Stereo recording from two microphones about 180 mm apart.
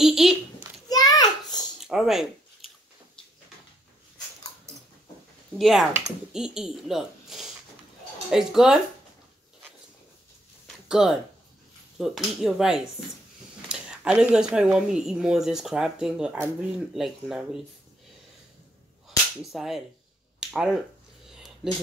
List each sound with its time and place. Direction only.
0.0 s a child's voice: centre (ahead or behind)
0.8 s a sound: 20° left (ahead or behind)
1.8 s a sound: centre (ahead or behind)
5.6 s speech: centre (ahead or behind)
10.9 s speech: centre (ahead or behind)
19.0 s cap gun: centre (ahead or behind)
20.3 s speech: 5° right (ahead or behind)